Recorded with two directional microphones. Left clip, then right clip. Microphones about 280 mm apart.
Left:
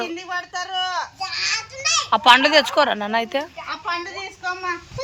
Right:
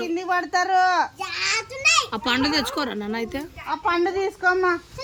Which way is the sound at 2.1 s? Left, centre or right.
Centre.